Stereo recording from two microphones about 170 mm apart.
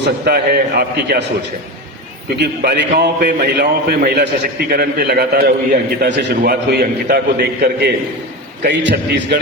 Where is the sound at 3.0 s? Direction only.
70° right (ahead or behind).